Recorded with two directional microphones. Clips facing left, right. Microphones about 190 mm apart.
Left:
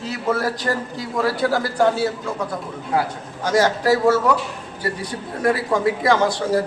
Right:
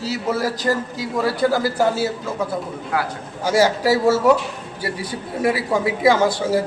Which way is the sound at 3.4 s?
10° right (ahead or behind).